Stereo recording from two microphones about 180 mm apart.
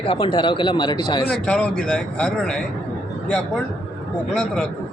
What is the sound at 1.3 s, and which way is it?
A woman's voice, 5° left (ahead or behind).